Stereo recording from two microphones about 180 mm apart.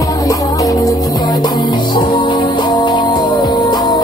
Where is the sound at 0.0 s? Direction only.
20° left (ahead or behind).